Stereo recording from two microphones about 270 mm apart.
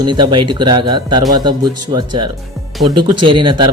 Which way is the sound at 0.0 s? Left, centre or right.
Centre.